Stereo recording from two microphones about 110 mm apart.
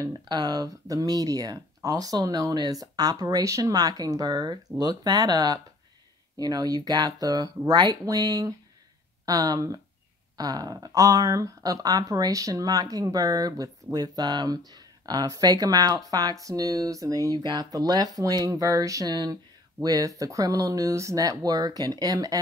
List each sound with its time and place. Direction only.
0.0 s speech: 40° right (ahead or behind)